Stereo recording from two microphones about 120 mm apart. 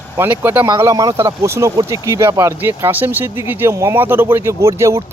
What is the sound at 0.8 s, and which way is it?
Speech, 30° right (ahead or behind).